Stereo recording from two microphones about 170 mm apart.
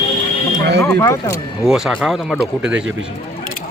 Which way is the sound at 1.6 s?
5° right (ahead or behind).